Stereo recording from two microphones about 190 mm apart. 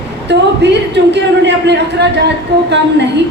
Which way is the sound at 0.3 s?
65° right (ahead or behind).